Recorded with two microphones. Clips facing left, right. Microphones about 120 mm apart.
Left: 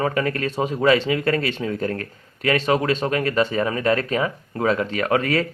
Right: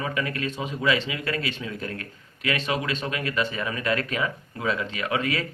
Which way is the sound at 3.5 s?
40° left (ahead or behind).